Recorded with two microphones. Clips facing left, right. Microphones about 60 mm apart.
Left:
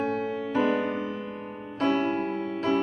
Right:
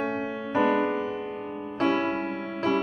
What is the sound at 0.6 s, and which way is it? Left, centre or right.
Music, centre.